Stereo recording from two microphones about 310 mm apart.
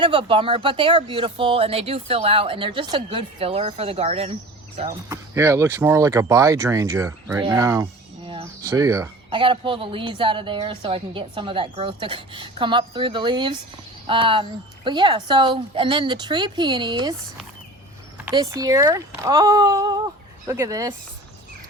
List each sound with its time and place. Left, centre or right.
0.0 s speech: centre
18.3 s speech: centre